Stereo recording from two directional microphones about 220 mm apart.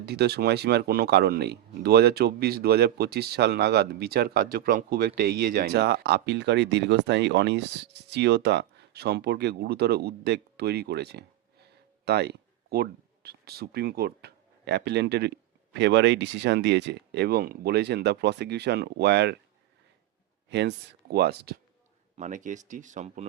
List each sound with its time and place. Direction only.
0.0 s speech: 45° right (ahead or behind)
20.5 s speech: 50° right (ahead or behind)
22.2 s speech: 35° right (ahead or behind)